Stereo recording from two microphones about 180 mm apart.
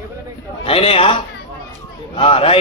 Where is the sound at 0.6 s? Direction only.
30° left (ahead or behind).